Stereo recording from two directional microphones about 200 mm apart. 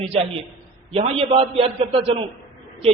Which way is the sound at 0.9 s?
30° right (ahead or behind).